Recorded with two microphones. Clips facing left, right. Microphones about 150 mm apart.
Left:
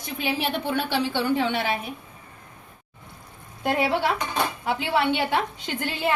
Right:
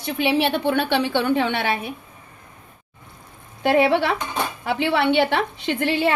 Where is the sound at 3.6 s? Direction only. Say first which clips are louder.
Right 5 dB; 70° right (ahead or behind).